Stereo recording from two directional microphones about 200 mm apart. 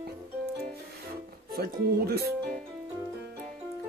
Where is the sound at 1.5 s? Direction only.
50° right (ahead or behind).